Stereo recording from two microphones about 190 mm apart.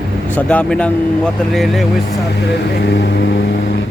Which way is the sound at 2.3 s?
60° left (ahead or behind).